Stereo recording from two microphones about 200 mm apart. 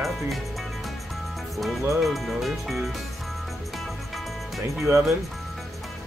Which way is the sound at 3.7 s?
Centre (ahead or behind).